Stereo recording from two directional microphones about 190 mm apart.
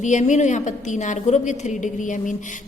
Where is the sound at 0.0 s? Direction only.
40° left (ahead or behind).